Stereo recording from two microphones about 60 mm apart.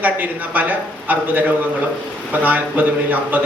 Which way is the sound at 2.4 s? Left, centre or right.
Right.